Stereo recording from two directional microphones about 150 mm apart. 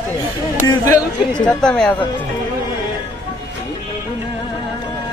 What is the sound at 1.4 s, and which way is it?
Speech, 5° left (ahead or behind).